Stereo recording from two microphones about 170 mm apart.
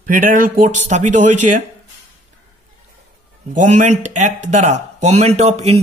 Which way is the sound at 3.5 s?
45° right (ahead or behind).